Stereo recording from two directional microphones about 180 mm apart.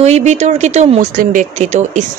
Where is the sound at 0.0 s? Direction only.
40° right (ahead or behind).